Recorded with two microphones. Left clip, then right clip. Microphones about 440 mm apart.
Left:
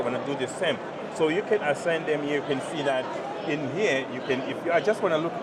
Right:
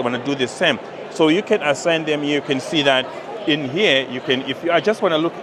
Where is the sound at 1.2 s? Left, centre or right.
Right.